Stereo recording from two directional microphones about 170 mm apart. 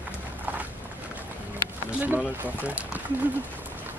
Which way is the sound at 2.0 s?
10° right (ahead or behind).